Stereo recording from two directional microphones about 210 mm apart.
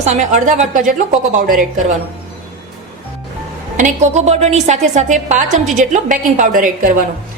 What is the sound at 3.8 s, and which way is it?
A woman's voice, 35° right (ahead or behind).